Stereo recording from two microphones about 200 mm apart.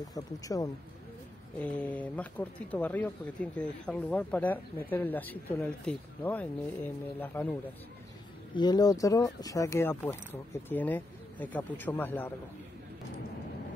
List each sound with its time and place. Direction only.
0.1 s speech: 15° left (ahead or behind)
1.6 s speech: 5° left (ahead or behind)
8.5 s speech: 20° left (ahead or behind)